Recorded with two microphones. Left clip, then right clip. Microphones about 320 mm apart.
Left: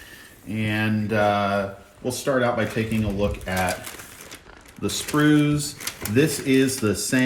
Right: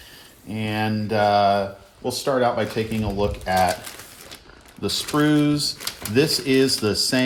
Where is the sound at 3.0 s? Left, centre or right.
Right.